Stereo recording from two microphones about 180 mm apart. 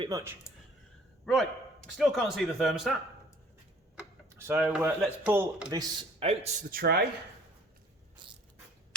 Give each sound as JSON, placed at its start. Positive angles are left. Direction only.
{"t": 0.0, "sound": "speech", "side_deg": -20}
{"t": 1.2, "sound": "a man's voice", "side_deg": 0}
{"t": 4.4, "sound": "a man's voice", "side_deg": -15}
{"t": 6.0, "sound": "a man's voice", "side_deg": -30}
{"t": 6.7, "sound": "speech", "side_deg": -60}
{"t": 8.2, "sound": "a sound", "side_deg": -25}